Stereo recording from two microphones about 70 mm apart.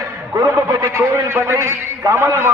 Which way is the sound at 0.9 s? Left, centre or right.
Right.